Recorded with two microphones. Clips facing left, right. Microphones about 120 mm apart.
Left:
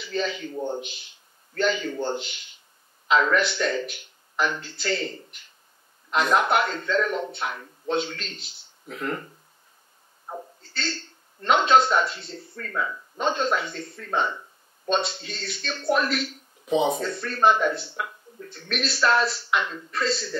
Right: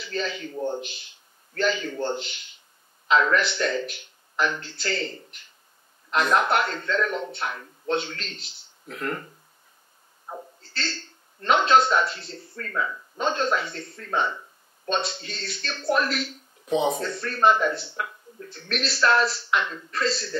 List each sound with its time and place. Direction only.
0.0 s speech: centre (ahead or behind)
10.2 s a sound: centre (ahead or behind)
11.4 s speech: centre (ahead or behind)